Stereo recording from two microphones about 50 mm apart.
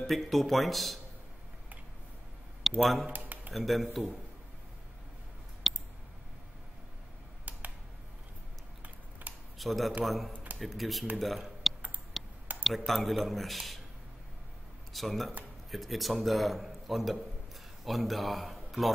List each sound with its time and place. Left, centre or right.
0.0 s a man's voice: centre
2.8 s a man's voice: centre
5.7 s a sound: centre
9.2 s computer keyboard: right
9.6 s a man's voice: centre
12.2 s a sound: centre
12.6 s a man's voice: centre
14.9 s a man's voice: centre